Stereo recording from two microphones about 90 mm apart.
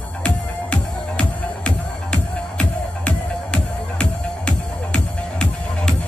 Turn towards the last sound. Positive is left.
turn(degrees=10)  # may be behind; listen again after turning